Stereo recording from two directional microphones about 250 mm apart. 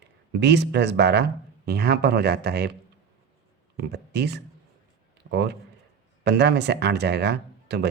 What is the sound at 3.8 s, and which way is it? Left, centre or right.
Speech, right.